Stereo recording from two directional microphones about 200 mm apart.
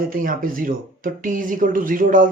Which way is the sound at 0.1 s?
45° right (ahead or behind).